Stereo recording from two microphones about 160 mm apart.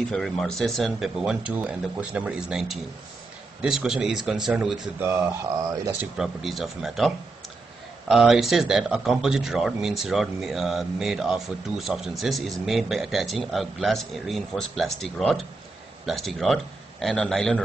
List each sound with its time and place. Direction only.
0.1 s speech: centre (ahead or behind)
4.9 s speech: 15° right (ahead or behind)
6.1 s speech: centre (ahead or behind)